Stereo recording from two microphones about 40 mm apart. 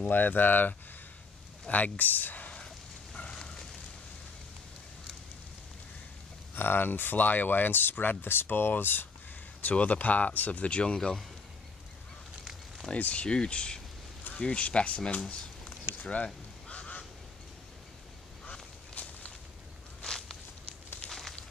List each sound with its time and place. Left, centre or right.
0.0 s speech: left
2.5 s a sound: centre
3.3 s fire: centre
6.5 s speech: left
9.6 s speech: left
12.9 s speech: left
16.6 s duck: left
18.4 s walk: left
20.0 s walk: centre
21.1 s fire: centre